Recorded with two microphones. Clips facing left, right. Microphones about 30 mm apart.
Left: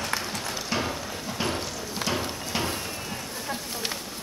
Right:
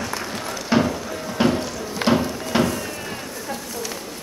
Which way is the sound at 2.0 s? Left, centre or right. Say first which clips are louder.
Right 10 dB; right.